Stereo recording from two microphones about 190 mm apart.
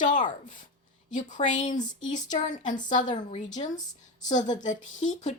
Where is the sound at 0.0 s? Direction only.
40° left (ahead or behind).